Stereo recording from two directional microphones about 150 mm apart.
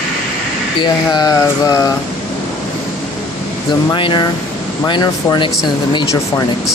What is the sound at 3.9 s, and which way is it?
Speech, 30° left (ahead or behind).